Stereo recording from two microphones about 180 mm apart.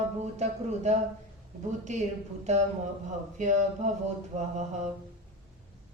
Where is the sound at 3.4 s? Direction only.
45° right (ahead or behind).